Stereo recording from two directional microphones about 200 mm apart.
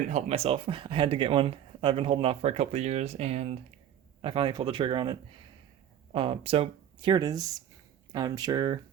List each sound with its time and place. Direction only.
0.1 s speech: 35° right (ahead or behind)
6.1 s speech: 25° right (ahead or behind)